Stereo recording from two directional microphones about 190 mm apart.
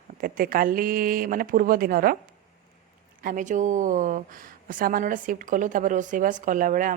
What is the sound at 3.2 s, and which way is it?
A woman's voice, 45° right (ahead or behind).